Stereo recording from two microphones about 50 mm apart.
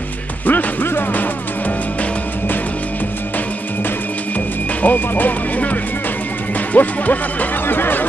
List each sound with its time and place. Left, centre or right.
0.5 s speech: left
4.8 s speech: left